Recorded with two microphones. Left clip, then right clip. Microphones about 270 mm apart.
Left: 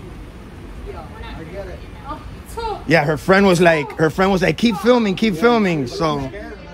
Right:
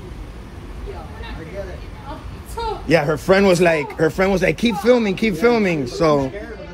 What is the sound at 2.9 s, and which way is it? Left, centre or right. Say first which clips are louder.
Speech: left 1 dB; left.